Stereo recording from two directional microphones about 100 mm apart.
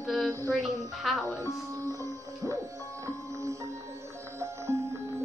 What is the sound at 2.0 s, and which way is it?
Music, 30° right (ahead or behind).